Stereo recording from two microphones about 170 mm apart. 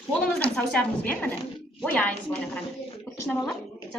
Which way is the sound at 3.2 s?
10° left (ahead or behind).